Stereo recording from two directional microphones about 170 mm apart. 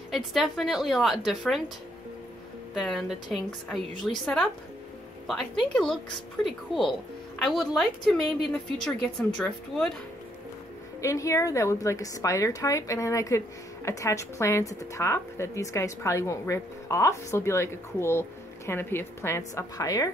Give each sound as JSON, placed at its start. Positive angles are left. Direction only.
{"t": 0.1, "sound": "a woman's voice", "side_deg": 0}
{"t": 2.7, "sound": "a woman's voice", "side_deg": 0}
{"t": 5.2, "sound": "a woman's voice", "side_deg": 5}
{"t": 11.0, "sound": "a woman's voice", "side_deg": 20}